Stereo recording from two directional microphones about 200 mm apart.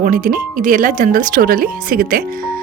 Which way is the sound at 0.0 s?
40° right (ahead or behind).